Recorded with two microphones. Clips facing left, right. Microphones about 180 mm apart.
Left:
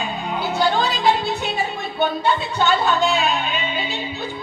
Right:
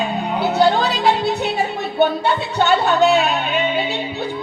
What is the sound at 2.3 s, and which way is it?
Music, 65° right (ahead or behind).